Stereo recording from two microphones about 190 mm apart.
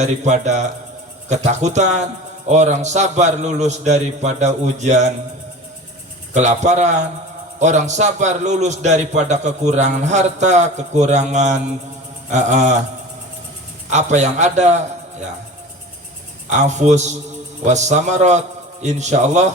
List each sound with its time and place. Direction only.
0.0 s a man's voice: 40° right (ahead or behind)
6.3 s a man's voice: 40° right (ahead or behind)
13.9 s a man's voice: 40° right (ahead or behind)
16.5 s a man's voice: 40° right (ahead or behind)